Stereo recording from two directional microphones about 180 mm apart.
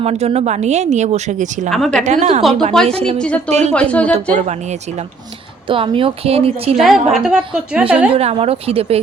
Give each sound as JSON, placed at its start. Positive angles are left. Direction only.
{"t": 0.0, "sound": "speech", "side_deg": -35}
{"t": 1.7, "sound": "a woman's voice", "side_deg": 5}
{"t": 2.0, "sound": "speech", "side_deg": -40}
{"t": 2.8, "sound": "a woman's voice", "side_deg": 5}
{"t": 4.1, "sound": "speech", "side_deg": -40}
{"t": 5.6, "sound": "speech", "side_deg": -30}
{"t": 6.7, "sound": "a woman's voice", "side_deg": 0}
{"t": 8.1, "sound": "speech", "side_deg": -35}